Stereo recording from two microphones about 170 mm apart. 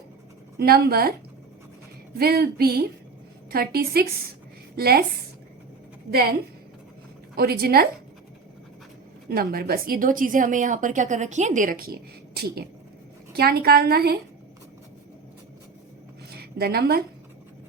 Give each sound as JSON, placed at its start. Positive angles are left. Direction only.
{"t": 0.5, "sound": "a woman's voice", "side_deg": -65}
{"t": 2.1, "sound": "a woman's voice", "side_deg": -65}
{"t": 7.3, "sound": "a woman's voice", "side_deg": -65}
{"t": 9.3, "sound": "a woman's voice", "side_deg": -60}
{"t": 16.6, "sound": "speech", "side_deg": -65}